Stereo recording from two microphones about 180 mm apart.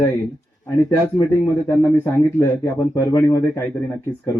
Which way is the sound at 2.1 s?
15° left (ahead or behind).